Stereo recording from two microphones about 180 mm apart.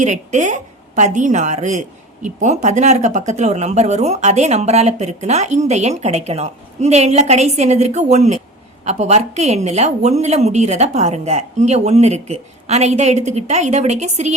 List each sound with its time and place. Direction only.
0.0 s speech: 40° right (ahead or behind)